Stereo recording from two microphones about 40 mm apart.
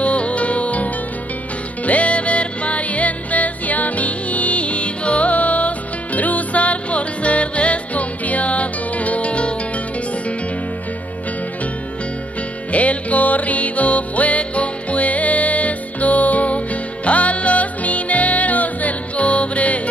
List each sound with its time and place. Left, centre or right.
0.0 s music: left
1.9 s music: left
12.7 s music: left